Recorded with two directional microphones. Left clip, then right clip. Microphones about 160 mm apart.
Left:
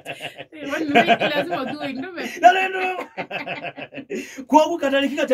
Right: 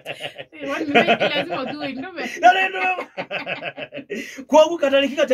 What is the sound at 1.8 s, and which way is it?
Speech, 20° left (ahead or behind).